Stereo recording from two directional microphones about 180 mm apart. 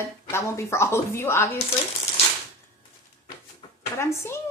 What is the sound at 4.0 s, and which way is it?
Speech, 15° left (ahead or behind).